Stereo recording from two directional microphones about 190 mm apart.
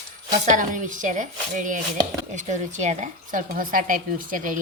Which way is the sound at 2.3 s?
40° right (ahead or behind).